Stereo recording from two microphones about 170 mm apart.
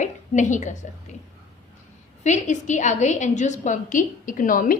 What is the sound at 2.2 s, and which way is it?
A woman's voice, 45° left (ahead or behind).